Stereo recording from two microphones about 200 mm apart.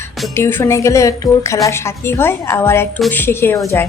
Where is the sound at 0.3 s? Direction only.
15° left (ahead or behind).